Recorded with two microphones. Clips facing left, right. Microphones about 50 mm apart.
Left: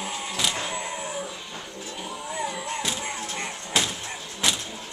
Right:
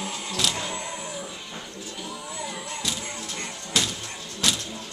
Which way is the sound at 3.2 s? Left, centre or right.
Left.